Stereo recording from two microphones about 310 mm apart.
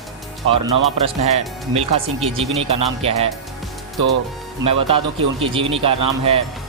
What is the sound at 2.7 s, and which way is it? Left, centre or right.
Speech, centre.